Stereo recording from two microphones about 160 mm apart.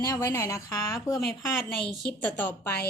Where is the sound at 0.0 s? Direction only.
20° left (ahead or behind).